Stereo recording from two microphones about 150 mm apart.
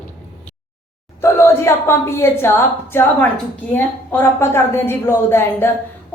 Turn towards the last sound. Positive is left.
turn(degrees=15)  # may be behind; listen again after turning